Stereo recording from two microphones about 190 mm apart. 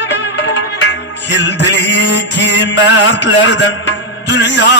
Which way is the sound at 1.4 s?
70° left (ahead or behind).